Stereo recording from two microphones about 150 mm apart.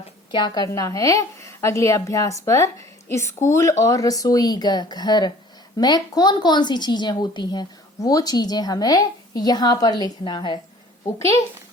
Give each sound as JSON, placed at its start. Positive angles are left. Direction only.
{"t": 0.3, "sound": "a woman's voice", "side_deg": 30}